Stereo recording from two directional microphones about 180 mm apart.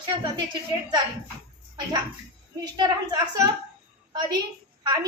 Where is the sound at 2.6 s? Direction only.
25° right (ahead or behind).